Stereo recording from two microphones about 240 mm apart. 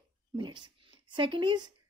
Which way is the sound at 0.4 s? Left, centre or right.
Centre.